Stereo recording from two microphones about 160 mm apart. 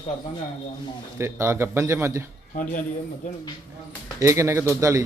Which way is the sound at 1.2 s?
15° right (ahead or behind).